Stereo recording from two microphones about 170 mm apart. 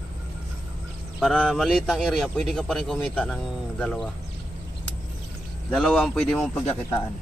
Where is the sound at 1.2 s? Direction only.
Centre (ahead or behind).